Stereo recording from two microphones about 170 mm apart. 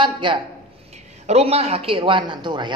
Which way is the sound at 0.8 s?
40° right (ahead or behind).